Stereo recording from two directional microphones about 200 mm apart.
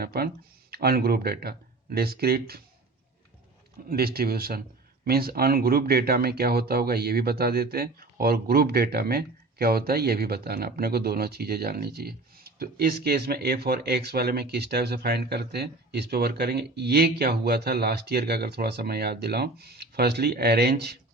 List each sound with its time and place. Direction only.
0.0 s speech: 50° right (ahead or behind)
3.8 s speech: 50° right (ahead or behind)